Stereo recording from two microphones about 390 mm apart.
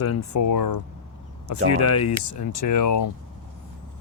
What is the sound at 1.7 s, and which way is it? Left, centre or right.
Speech, left.